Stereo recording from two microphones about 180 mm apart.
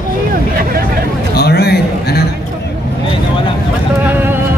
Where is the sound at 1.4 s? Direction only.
65° left (ahead or behind).